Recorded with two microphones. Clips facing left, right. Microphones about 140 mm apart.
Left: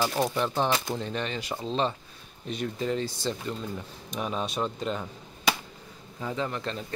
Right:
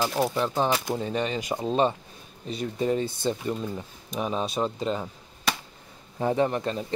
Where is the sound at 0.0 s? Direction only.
5° right (ahead or behind).